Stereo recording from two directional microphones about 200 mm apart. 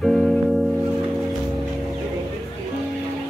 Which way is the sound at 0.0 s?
Centre (ahead or behind).